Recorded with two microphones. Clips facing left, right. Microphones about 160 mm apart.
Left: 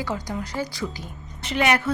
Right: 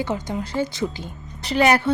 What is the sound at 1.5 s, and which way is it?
Speech, 35° right (ahead or behind).